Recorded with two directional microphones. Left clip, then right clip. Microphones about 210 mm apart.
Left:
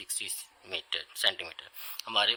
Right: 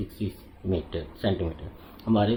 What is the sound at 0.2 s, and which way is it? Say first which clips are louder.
Speech: right 5 dB; 55° left (ahead or behind).